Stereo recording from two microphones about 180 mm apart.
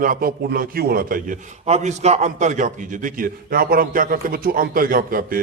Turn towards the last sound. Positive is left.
turn(degrees=-50)  # may be behind; listen again after turning